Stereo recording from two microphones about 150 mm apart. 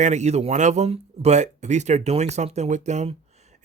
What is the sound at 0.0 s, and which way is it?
Speech, 50° right (ahead or behind).